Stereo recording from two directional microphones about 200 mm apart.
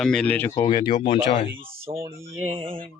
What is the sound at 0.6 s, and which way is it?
Speech, 25° left (ahead or behind).